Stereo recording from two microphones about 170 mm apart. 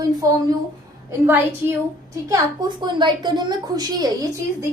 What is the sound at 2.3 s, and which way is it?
A woman's voice, 25° right (ahead or behind).